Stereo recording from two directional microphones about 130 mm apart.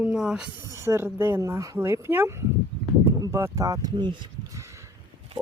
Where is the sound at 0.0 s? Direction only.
5° right (ahead or behind).